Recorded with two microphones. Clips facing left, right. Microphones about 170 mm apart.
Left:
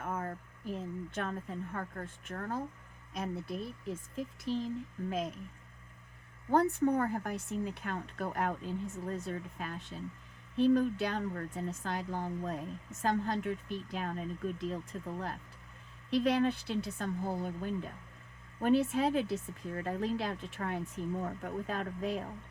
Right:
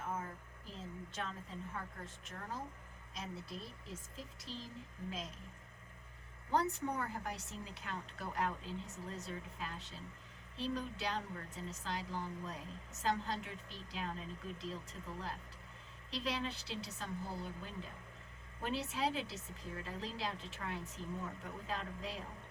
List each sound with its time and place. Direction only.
0.0 s speech: 60° left (ahead or behind)
6.5 s speech: 50° left (ahead or behind)